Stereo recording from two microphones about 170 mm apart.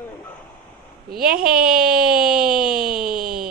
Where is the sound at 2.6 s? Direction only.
60° right (ahead or behind).